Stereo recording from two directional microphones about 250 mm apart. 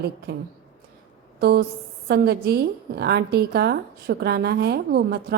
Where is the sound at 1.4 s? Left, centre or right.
Right.